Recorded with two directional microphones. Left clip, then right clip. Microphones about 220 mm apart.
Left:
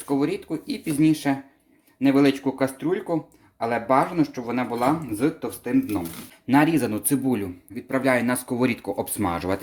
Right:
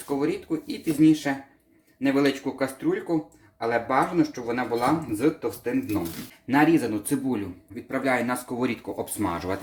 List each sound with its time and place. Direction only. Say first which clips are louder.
0.1 s speech: left 2 dB; 45° left (ahead or behind)